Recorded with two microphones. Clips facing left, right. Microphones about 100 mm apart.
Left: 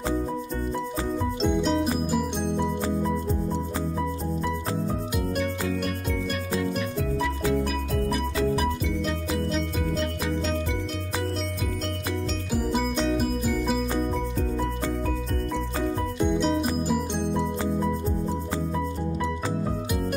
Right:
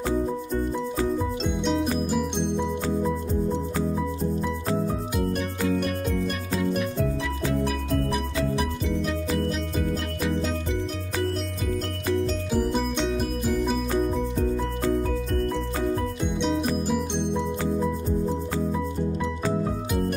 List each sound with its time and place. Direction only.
1.4 s music: centre (ahead or behind)
9.5 s music: 5° right (ahead or behind)
12.5 s music: 5° left (ahead or behind)
16.3 s music: centre (ahead or behind)